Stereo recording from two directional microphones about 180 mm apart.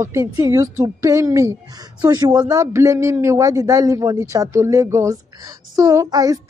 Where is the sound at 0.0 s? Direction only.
15° right (ahead or behind).